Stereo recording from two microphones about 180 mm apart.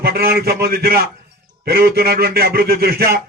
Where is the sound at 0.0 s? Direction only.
60° right (ahead or behind).